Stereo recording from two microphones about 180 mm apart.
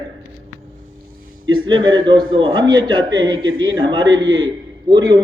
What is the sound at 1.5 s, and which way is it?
A man's voice, 25° right (ahead or behind).